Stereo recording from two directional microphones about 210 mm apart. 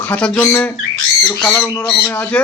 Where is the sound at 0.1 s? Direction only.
10° left (ahead or behind).